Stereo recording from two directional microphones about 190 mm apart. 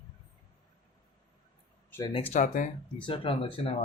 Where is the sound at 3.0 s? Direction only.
25° left (ahead or behind).